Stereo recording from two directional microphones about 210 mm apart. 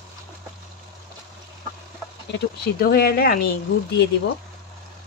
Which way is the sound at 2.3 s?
50° left (ahead or behind).